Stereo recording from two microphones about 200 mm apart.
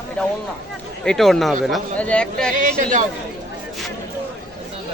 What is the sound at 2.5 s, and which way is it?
Speech, 45° right (ahead or behind).